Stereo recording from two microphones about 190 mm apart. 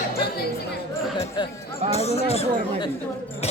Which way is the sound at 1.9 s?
35° left (ahead or behind).